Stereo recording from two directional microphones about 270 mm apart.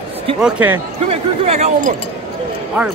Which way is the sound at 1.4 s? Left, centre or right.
Right.